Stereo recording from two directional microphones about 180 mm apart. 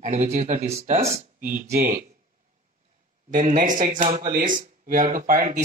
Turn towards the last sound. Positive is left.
turn(degrees=-50)  # may be behind; listen again after turning